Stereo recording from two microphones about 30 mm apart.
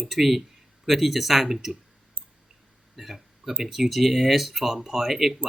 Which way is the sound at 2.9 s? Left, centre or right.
Centre.